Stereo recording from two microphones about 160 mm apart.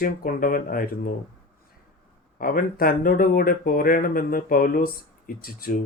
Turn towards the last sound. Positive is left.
turn(degrees=65)  # may be behind; listen again after turning